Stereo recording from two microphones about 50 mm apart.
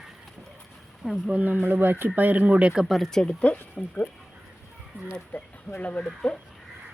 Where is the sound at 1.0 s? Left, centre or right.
Centre.